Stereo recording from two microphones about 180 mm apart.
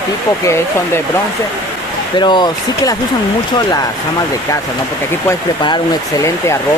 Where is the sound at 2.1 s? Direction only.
25° left (ahead or behind).